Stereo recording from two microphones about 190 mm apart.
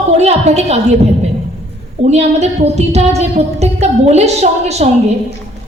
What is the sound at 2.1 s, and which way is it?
A woman's voice, 35° right (ahead or behind).